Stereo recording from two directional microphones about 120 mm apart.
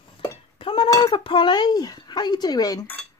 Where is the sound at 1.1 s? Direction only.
45° left (ahead or behind).